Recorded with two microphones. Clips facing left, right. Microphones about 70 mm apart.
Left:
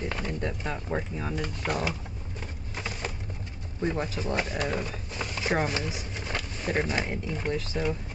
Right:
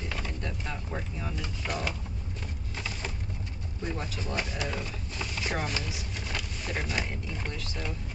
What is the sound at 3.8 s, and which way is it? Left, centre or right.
Speech, left.